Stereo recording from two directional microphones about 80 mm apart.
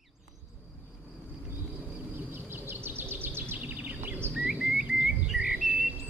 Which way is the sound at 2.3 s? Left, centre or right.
Right.